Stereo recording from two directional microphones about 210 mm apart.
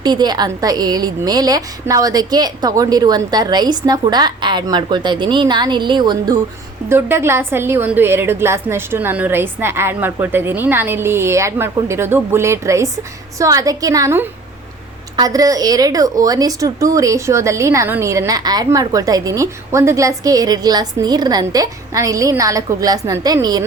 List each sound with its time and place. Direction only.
0.0 s a woman's voice: 20° right (ahead or behind)